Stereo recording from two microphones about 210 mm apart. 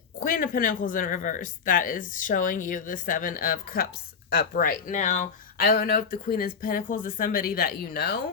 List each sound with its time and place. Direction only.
0.3 s speech: 40° left (ahead or behind)
5.6 s speech: 50° left (ahead or behind)